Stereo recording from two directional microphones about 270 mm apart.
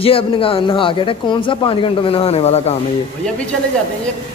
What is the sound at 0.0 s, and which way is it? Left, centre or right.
Speech, centre.